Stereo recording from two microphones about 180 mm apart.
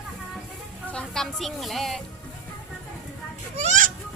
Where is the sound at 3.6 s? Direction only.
45° right (ahead or behind).